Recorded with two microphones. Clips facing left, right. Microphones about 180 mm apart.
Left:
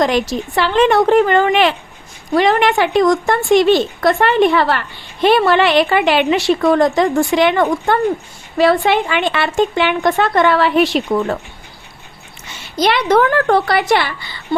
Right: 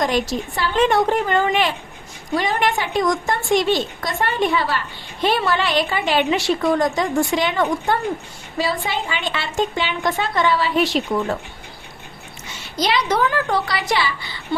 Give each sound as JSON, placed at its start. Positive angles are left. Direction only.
{"t": 0.0, "sound": "a woman's voice", "side_deg": 75}
{"t": 12.8, "sound": "a woman's voice", "side_deg": 60}